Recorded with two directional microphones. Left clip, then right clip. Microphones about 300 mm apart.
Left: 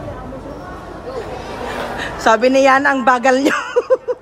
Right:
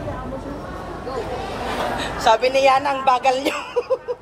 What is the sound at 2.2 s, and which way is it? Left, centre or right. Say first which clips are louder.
A woman's voice: left 4 dB; left.